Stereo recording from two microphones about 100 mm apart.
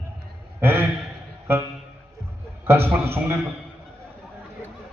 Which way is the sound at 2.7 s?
20° right (ahead or behind).